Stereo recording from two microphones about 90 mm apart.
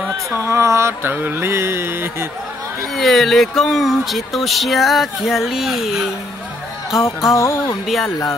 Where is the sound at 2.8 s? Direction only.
Centre (ahead or behind).